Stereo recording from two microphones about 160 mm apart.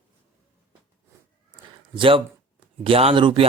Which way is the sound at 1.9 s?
35° right (ahead or behind).